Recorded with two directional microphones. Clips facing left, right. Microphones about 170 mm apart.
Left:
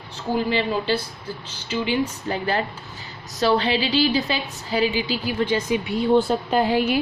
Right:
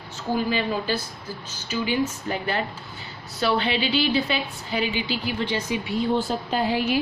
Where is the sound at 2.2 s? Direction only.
35° left (ahead or behind); by 7.0 s 60° left (ahead or behind).